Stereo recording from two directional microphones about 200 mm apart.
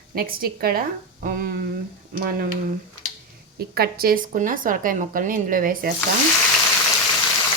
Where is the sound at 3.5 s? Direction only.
50° right (ahead or behind).